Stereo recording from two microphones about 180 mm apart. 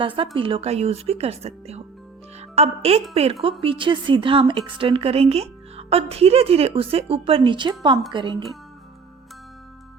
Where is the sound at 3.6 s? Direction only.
30° right (ahead or behind).